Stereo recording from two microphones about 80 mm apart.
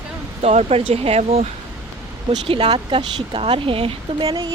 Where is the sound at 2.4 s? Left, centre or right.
Right.